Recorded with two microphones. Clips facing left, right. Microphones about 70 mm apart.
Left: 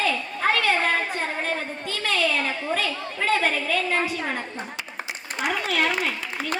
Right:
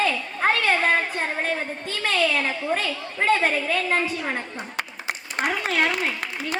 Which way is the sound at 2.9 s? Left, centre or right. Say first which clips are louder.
Left 1 dB; left.